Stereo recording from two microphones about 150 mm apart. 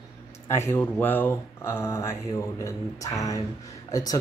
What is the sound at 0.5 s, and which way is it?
Speech, 15° left (ahead or behind).